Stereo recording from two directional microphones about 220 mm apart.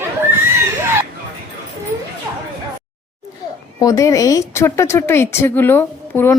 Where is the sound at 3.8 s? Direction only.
15° left (ahead or behind).